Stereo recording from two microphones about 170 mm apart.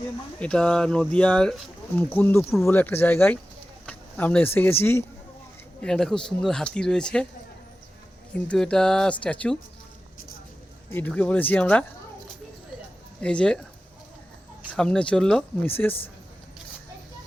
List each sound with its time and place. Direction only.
0.3 s speech: 5° left (ahead or behind)
8.4 s speech: 5° left (ahead or behind)
10.9 s speech: 10° left (ahead or behind)
13.2 s speech: 5° left (ahead or behind)
14.7 s speech: 5° left (ahead or behind)